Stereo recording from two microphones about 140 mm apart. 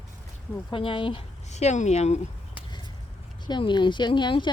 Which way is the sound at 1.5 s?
55° left (ahead or behind).